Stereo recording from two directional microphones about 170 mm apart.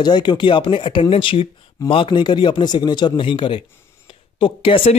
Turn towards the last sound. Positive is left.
turn(degrees=30)  # may be behind; listen again after turning